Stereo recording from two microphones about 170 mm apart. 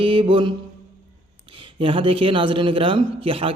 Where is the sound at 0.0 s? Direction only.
30° right (ahead or behind).